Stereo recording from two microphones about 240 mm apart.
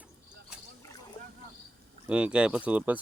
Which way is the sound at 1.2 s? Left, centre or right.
Left.